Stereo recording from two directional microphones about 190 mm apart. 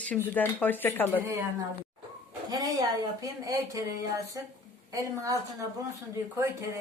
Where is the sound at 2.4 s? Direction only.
20° right (ahead or behind).